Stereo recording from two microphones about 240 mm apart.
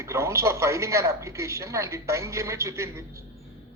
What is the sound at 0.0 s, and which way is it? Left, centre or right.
Speech, centre.